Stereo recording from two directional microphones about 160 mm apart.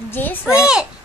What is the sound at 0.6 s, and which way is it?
Speech, 5° right (ahead or behind).